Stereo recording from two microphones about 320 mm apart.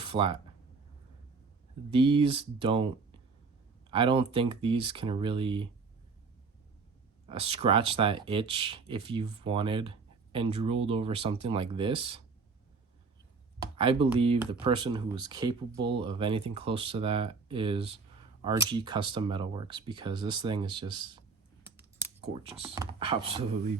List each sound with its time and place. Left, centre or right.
0.0 s a sound: centre
1.9 s speech: centre
7.3 s speech: centre
13.6 s speech: centre